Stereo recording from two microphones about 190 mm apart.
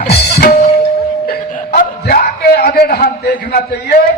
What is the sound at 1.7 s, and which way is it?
A man's voice, 50° left (ahead or behind).